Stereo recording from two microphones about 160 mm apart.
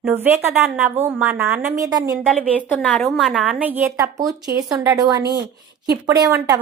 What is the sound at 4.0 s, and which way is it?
Speech, 20° right (ahead or behind).